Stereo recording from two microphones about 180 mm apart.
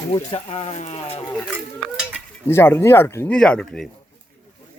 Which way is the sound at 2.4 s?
15° left (ahead or behind).